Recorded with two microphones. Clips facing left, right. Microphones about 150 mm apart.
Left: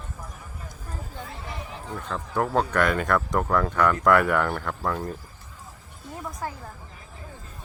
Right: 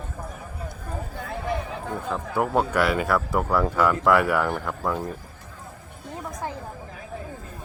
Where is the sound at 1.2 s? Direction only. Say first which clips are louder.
Right 9 dB; 55° right (ahead or behind).